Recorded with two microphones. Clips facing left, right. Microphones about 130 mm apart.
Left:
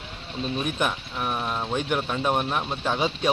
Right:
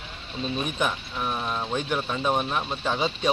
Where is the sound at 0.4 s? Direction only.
5° left (ahead or behind).